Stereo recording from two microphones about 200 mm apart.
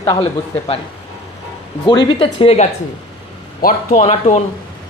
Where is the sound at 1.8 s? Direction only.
20° left (ahead or behind).